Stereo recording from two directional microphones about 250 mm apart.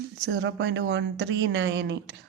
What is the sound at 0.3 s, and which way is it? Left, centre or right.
Speech, right.